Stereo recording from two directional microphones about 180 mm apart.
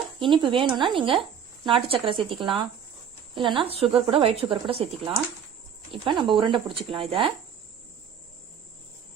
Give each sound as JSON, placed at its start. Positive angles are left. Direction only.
{"t": 0.2, "sound": "a woman's voice", "side_deg": -30}